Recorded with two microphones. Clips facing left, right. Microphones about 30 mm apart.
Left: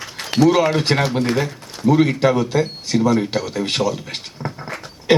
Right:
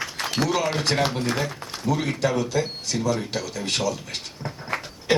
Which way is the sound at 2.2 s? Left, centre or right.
Left.